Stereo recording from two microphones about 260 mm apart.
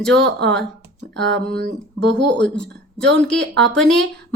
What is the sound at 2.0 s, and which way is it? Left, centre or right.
Speech, right.